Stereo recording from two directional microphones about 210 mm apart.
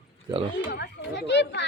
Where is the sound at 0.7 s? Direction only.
50° left (ahead or behind).